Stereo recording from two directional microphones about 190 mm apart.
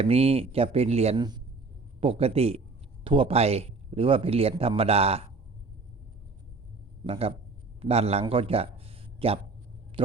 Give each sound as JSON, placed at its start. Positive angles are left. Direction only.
{"t": 0.0, "sound": "speech", "side_deg": -30}
{"t": 7.0, "sound": "a man's voice", "side_deg": -30}